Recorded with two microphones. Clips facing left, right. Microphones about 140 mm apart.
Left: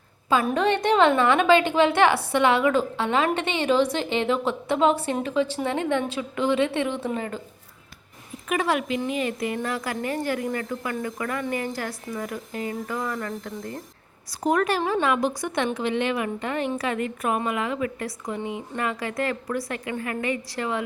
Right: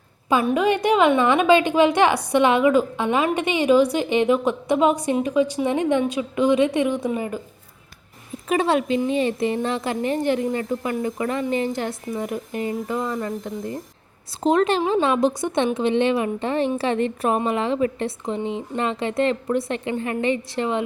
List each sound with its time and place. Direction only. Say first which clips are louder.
0.5 s a woman's voice: right 2 dB; 10° right (ahead or behind)
8.4 s a woman's voice: right 4 dB; 25° right (ahead or behind)